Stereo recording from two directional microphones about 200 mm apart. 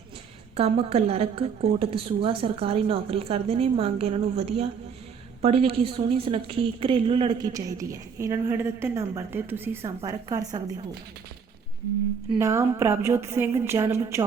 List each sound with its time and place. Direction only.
0.5 s a woman's voice: 30° right (ahead or behind)
7.5 s a woman's voice: 15° right (ahead or behind)
12.4 s a woman's voice: 15° right (ahead or behind)